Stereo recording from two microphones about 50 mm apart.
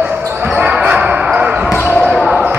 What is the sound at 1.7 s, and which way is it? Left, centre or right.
Basketball bounce, left.